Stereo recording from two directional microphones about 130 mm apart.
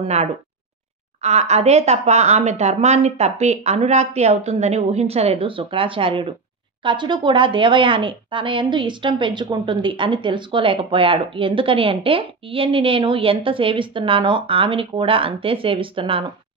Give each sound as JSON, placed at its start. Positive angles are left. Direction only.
{"t": 0.0, "sound": "speech", "side_deg": -55}